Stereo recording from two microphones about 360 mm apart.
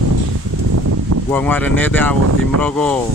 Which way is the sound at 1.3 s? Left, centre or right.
Centre.